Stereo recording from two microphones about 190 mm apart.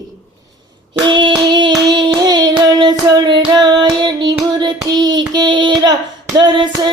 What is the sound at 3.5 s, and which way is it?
Child singing, 20° right (ahead or behind).